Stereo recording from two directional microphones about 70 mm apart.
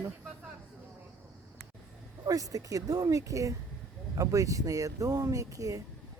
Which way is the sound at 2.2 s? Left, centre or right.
Right.